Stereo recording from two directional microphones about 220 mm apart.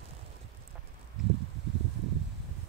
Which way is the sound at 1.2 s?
Centre (ahead or behind).